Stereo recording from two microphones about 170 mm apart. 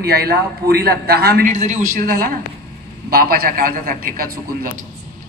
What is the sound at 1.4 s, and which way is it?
A man's voice, 45° right (ahead or behind).